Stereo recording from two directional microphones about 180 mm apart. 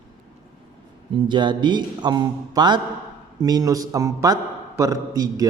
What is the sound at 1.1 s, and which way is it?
A man's voice, 25° right (ahead or behind).